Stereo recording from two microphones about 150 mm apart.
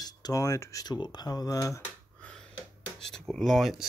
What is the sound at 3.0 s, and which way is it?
Speech, 5° left (ahead or behind).